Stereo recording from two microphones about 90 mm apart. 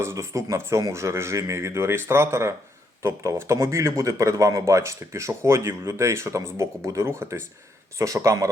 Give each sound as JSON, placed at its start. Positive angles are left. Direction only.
{"t": 0.0, "sound": "speech", "side_deg": -30}